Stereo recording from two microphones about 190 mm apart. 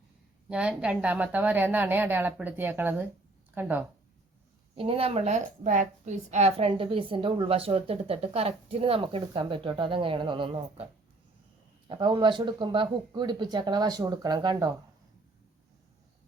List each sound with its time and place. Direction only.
0.4 s a woman's voice: 5° right (ahead or behind)
4.7 s a woman's voice: 30° right (ahead or behind)
11.9 s a woman's voice: 25° right (ahead or behind)